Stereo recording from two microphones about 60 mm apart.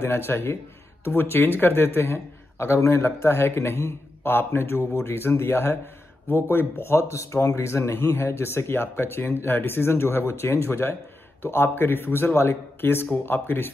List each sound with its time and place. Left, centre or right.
0.0 s a man's voice: left